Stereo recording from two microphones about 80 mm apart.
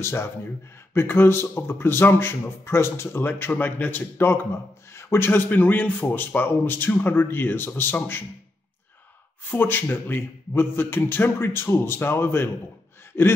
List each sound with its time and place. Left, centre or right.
0.0 s a man's voice: left
9.5 s a man's voice: left